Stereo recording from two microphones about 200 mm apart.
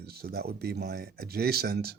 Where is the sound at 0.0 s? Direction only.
50° right (ahead or behind).